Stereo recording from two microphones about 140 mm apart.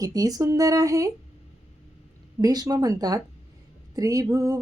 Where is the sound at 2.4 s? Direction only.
25° right (ahead or behind).